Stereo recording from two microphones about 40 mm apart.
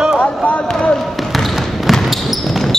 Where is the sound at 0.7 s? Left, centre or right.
Left.